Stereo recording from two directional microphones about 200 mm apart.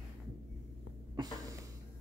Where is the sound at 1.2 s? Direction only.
20° right (ahead or behind).